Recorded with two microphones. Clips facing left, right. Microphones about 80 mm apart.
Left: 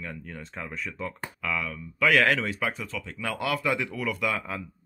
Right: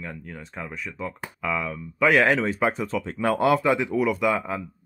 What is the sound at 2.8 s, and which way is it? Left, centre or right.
Speech, right.